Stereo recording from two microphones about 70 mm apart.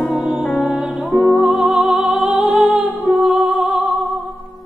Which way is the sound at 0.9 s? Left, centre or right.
Centre.